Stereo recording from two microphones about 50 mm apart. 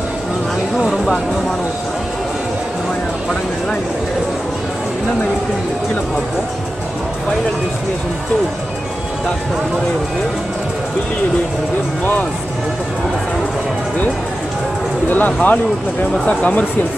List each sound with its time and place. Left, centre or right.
0.7 s music: centre
15.0 s speech: left
16.1 s speech: centre